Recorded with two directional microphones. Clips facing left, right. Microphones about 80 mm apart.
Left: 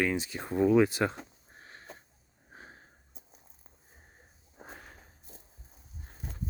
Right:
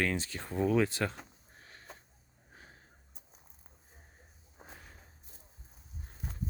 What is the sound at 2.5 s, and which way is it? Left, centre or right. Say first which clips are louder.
Sniff: left 5 dB; left.